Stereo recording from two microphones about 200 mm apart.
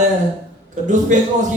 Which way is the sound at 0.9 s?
40° right (ahead or behind).